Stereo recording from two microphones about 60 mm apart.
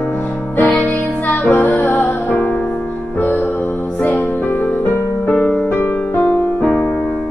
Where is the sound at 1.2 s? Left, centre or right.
Left.